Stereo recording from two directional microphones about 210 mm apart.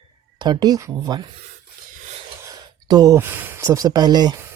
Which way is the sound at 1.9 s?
35° right (ahead or behind).